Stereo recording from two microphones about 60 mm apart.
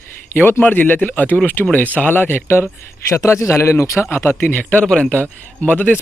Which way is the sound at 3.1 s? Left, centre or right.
Left.